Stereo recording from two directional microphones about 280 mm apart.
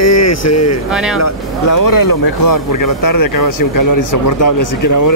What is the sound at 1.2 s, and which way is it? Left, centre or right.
Speech, left.